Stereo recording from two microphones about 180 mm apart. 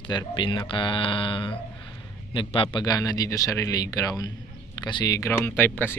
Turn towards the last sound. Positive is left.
turn(degrees=10)  # may be behind; listen again after turning